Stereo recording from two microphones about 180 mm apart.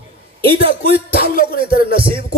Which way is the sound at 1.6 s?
30° right (ahead or behind).